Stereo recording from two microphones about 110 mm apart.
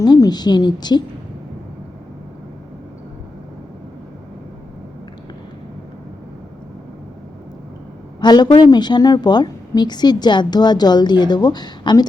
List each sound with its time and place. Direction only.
0.0 s a woman's voice: 35° left (ahead or behind)
8.2 s a woman's voice: 40° left (ahead or behind)